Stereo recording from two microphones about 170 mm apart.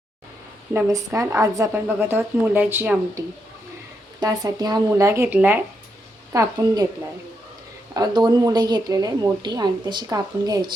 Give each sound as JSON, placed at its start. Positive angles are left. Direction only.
{"t": 0.7, "sound": "a woman's voice", "side_deg": -15}
{"t": 4.2, "sound": "a woman's voice", "side_deg": -20}
{"t": 7.9, "sound": "a woman's voice", "side_deg": -20}